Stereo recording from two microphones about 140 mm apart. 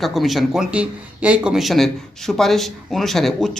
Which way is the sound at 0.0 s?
Centre (ahead or behind).